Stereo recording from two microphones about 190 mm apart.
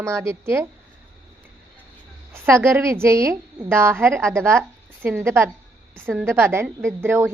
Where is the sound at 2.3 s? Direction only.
15° right (ahead or behind).